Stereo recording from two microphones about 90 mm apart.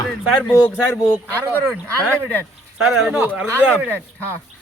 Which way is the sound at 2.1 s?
20° left (ahead or behind).